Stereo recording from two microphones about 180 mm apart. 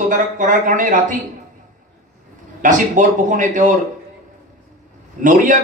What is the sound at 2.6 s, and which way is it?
Speech, 45° right (ahead or behind).